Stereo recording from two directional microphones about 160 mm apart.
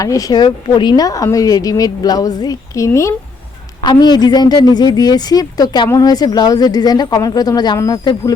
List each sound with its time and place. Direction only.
0.0 s a woman's voice: 20° left (ahead or behind)